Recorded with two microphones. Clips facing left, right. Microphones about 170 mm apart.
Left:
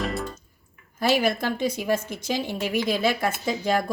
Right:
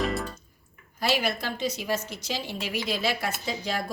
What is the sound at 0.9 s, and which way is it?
A woman's voice, 50° left (ahead or behind).